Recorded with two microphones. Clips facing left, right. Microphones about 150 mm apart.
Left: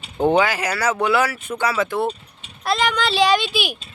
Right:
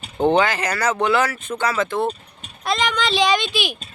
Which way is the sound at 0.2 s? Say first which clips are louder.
Even; 10° left (ahead or behind).